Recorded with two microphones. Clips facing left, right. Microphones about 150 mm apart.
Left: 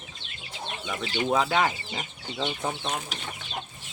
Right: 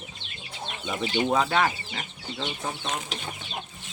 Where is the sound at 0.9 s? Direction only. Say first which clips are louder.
Right 4 dB; 20° right (ahead or behind).